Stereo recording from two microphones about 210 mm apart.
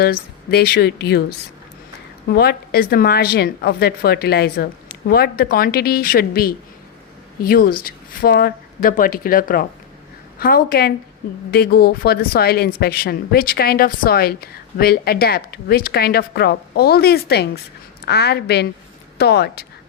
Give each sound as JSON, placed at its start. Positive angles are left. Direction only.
{"t": 0.0, "sound": "speech", "side_deg": 45}